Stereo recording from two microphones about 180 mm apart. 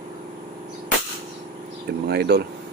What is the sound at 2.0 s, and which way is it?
Speech, 65° right (ahead or behind).